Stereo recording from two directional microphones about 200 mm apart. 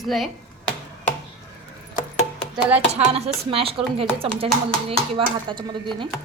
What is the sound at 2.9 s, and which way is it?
Speech, 30° right (ahead or behind).